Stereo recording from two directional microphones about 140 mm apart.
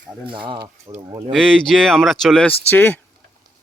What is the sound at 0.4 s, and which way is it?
Speech, 35° right (ahead or behind).